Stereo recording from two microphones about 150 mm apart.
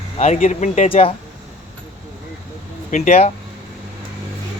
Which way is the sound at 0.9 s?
40° left (ahead or behind).